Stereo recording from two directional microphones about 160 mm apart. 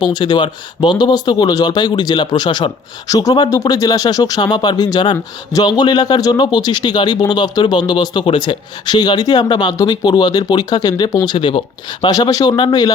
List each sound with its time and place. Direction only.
0.0 s a man's voice: 30° left (ahead or behind)